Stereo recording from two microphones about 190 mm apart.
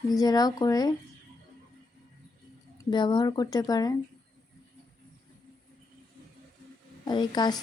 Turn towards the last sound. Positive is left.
turn(degrees=20)  # may be behind; listen again after turning